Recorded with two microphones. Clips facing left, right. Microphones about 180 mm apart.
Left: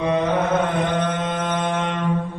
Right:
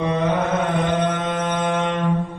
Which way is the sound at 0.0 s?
Centre (ahead or behind).